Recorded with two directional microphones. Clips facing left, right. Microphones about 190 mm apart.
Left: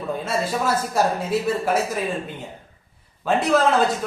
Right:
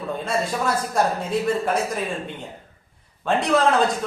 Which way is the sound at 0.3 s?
5° left (ahead or behind).